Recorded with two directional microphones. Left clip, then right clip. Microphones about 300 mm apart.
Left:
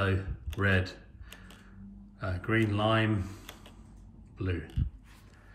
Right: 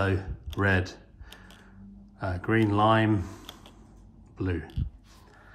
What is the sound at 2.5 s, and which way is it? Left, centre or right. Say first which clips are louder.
Speech: right 5 dB; centre.